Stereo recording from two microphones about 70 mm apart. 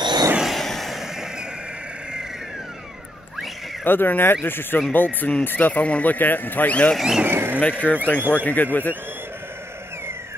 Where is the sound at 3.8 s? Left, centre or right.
Left.